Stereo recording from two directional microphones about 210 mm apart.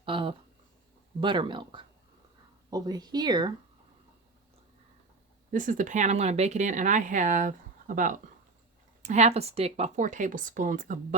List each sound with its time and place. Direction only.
0.0 s a sound: 25° right (ahead or behind)
1.2 s speech: 20° right (ahead or behind)
5.5 s speech: 40° right (ahead or behind)